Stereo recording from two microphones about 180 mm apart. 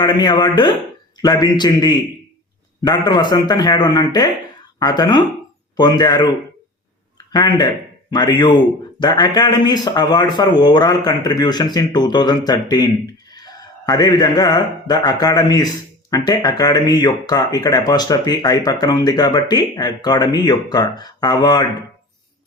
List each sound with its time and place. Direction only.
0.0 s speech: 25° left (ahead or behind)
7.3 s speech: 25° left (ahead or behind)